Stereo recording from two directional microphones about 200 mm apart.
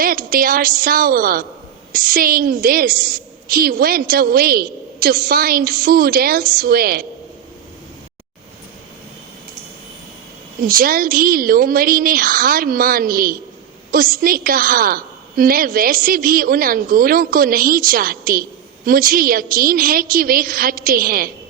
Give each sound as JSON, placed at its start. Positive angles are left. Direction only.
{"t": 0.0, "sound": "a woman's voice", "side_deg": -45}
{"t": 10.6, "sound": "a woman's voice", "side_deg": -45}